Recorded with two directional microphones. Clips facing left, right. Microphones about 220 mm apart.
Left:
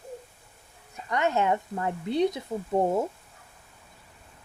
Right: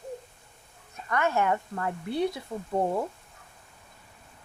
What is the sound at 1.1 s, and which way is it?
A woman's voice, 20° left (ahead or behind).